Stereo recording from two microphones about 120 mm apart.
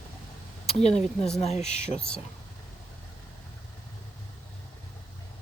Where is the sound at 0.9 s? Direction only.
5° left (ahead or behind).